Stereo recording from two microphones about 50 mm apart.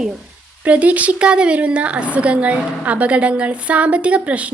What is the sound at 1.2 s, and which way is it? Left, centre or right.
A woman's voice, centre.